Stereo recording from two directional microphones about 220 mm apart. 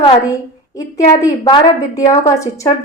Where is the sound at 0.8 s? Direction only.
15° left (ahead or behind).